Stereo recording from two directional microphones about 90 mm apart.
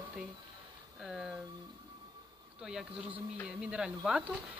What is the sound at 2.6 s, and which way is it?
Speech, 5° right (ahead or behind).